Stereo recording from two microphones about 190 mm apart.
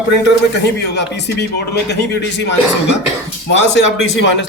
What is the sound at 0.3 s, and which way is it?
A man's voice, 65° left (ahead or behind).